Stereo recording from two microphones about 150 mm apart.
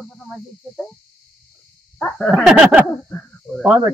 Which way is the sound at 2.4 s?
5° right (ahead or behind).